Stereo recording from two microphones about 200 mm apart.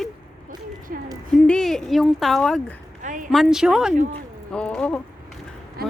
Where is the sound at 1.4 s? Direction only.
5° left (ahead or behind).